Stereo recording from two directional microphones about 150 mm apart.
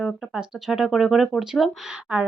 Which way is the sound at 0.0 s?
Centre (ahead or behind).